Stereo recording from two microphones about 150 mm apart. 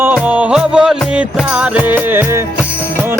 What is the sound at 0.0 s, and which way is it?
Music, 10° right (ahead or behind).